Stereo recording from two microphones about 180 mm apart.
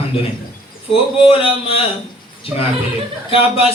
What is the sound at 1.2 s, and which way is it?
Music, 30° left (ahead or behind).